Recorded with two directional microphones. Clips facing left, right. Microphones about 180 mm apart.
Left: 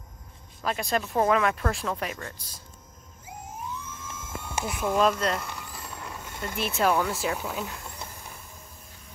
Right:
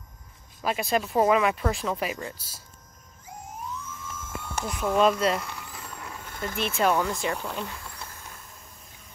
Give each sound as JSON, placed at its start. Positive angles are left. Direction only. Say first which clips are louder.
{"t": 0.6, "sound": "speech", "louder": "right 2 dB", "side_deg": -5}
{"t": 4.1, "sound": "vehicle", "louder": "left 1 dB", "side_deg": 10}
{"t": 6.4, "sound": "speech", "louder": "right 1 dB", "side_deg": 5}
{"t": 7.8, "sound": "a sound", "louder": "left 1 dB", "side_deg": 20}